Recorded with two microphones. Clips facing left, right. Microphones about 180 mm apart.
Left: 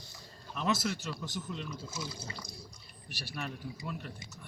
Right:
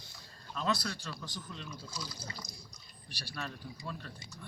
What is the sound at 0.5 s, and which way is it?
Speech, 20° left (ahead or behind).